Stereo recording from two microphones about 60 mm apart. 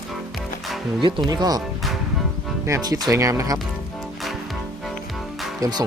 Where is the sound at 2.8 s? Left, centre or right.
Right.